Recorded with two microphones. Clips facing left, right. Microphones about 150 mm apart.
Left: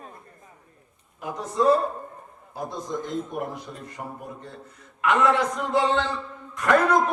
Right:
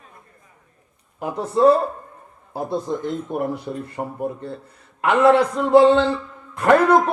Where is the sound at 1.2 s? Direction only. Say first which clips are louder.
Right 7 dB; 30° right (ahead or behind).